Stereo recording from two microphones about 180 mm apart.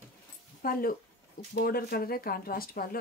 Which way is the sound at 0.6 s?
55° left (ahead or behind).